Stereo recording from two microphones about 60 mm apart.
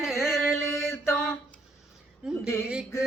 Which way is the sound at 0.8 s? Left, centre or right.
Left.